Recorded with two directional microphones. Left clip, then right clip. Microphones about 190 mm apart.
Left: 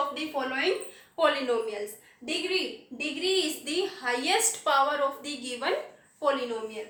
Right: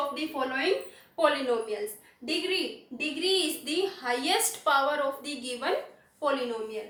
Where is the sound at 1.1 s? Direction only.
25° left (ahead or behind).